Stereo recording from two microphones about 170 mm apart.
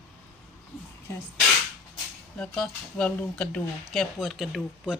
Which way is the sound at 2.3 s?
5° left (ahead or behind).